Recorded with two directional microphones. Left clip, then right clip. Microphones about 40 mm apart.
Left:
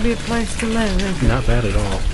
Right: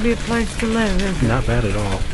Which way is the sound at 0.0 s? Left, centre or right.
Right.